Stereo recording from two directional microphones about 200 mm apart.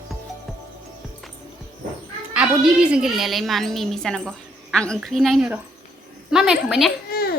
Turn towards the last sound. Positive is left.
turn(degrees=50)  # may be behind; listen again after turning